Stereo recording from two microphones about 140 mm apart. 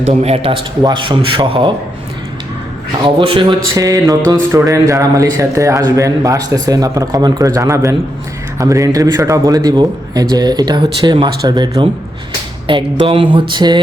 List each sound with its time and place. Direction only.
0.1 s a man's voice: 45° right (ahead or behind)
0.8 s a man's voice: 30° right (ahead or behind)
3.2 s a man's voice: 35° right (ahead or behind)
3.8 s a man's voice: 25° right (ahead or behind)